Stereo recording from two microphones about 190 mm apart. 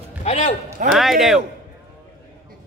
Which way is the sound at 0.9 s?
Centre (ahead or behind).